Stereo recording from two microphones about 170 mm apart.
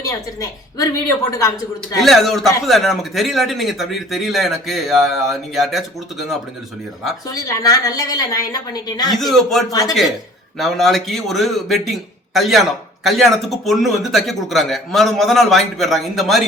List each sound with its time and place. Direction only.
0.0 s a woman's voice: 20° left (ahead or behind)
2.0 s speech: centre (ahead or behind)
7.3 s a woman's voice: 20° left (ahead or behind)
9.1 s speech: centre (ahead or behind)
9.6 s a woman's voice: 20° left (ahead or behind)
10.6 s speech: centre (ahead or behind)